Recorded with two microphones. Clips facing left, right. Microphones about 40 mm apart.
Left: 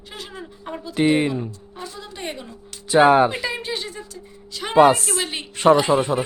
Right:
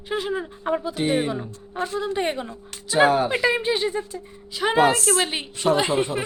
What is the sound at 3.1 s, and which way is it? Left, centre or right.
Speech, left.